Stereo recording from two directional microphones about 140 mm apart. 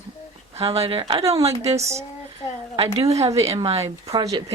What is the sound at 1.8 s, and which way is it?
Speech, 20° right (ahead or behind).